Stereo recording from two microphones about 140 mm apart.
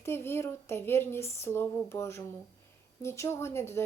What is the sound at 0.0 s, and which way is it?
A woman's voice, 15° left (ahead or behind).